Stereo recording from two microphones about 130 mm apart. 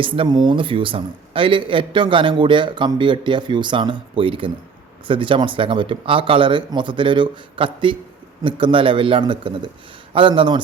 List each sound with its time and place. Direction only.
0.0 s speech: 40° right (ahead or behind)